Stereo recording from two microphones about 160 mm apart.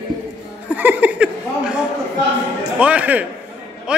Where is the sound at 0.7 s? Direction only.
10° right (ahead or behind).